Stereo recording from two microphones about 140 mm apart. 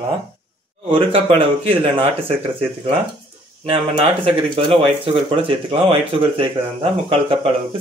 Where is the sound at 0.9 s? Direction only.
40° right (ahead or behind).